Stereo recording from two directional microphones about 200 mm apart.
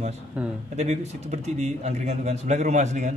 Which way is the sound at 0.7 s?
35° right (ahead or behind).